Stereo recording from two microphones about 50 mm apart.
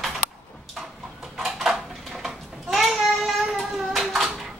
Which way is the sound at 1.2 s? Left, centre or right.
Centre.